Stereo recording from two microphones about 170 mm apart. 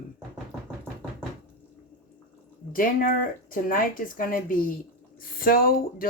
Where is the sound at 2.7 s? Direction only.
55° left (ahead or behind).